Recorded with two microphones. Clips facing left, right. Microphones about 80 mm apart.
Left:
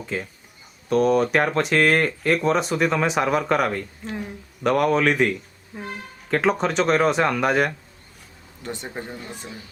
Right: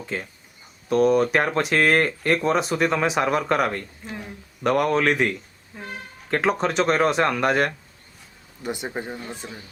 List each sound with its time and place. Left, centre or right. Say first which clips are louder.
0.0 s speech: left 1 dB; centre
8.6 s speech: right 3 dB; centre
9.4 s speech: even; centre